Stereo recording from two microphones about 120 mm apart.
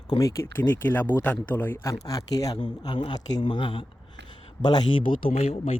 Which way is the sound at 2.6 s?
40° left (ahead or behind).